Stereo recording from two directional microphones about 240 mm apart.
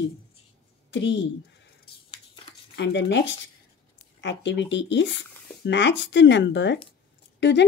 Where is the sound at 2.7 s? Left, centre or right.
Left.